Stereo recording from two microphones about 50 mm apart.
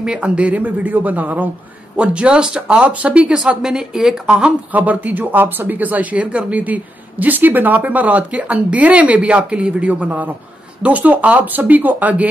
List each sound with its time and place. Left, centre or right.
0.0 s speech: right
2.0 s speech: right
3.6 s speech: centre
4.7 s speech: right